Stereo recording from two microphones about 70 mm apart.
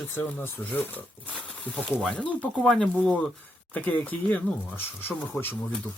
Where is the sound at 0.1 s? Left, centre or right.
Left.